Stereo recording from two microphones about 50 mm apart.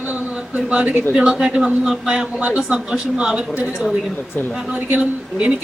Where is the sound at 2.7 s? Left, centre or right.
Centre.